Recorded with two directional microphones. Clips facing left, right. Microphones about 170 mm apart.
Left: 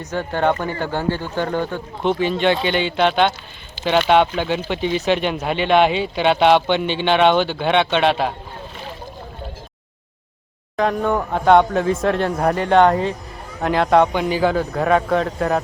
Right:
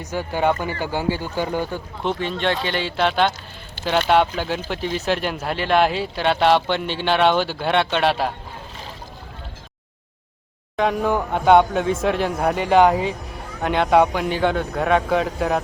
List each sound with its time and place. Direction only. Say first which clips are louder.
0.1 s speech: left 1 dB; 5° right (ahead or behind)
2.1 s speech: left 6 dB; 5° left (ahead or behind)
10.8 s speech: left 1 dB; centre (ahead or behind)